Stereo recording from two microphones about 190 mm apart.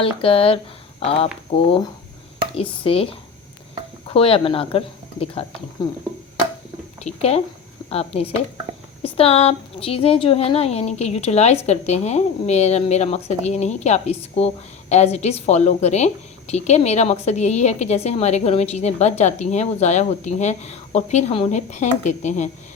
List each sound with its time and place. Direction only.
0.0 s a woman's voice: 30° left (ahead or behind)
7.0 s a woman's voice: 35° left (ahead or behind)